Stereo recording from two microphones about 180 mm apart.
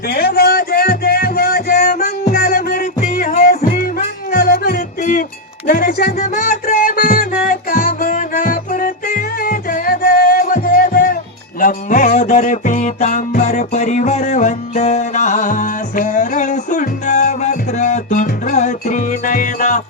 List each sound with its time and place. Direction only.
0.1 s music: 60° left (ahead or behind)
6.1 s music: 45° left (ahead or behind)